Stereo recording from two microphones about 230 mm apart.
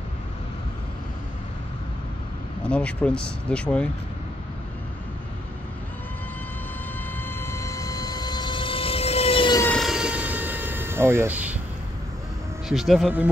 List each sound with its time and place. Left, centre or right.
2.6 s speech: centre
7.2 s vehicle: centre
9.6 s aircraft: centre
12.6 s speech: centre